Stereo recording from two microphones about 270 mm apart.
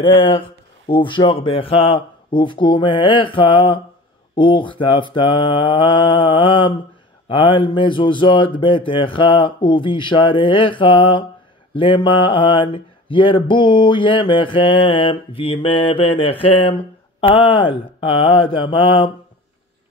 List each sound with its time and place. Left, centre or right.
0.0 s speech: centre